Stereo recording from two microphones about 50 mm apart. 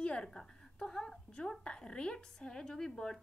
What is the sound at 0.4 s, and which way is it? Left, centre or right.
A woman's voice, centre.